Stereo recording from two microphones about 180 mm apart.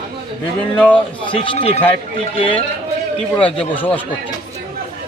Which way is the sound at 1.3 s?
30° left (ahead or behind).